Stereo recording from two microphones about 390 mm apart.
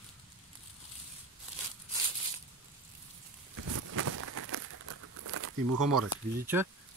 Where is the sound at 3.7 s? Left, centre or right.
Right.